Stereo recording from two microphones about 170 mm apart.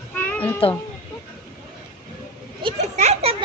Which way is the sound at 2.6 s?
40° right (ahead or behind).